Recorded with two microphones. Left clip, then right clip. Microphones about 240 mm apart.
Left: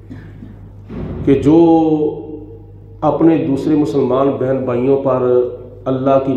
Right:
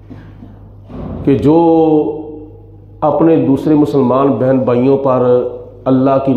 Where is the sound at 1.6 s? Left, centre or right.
Right.